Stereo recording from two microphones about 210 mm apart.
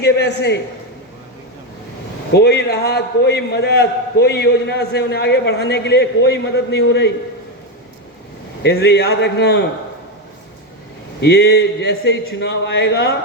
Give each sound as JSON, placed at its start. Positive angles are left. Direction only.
{"t": 0.0, "sound": "a man's voice", "side_deg": 50}
{"t": 2.3, "sound": "a man's voice", "side_deg": 50}
{"t": 8.6, "sound": "a man's voice", "side_deg": 50}
{"t": 11.2, "sound": "a man's voice", "side_deg": 50}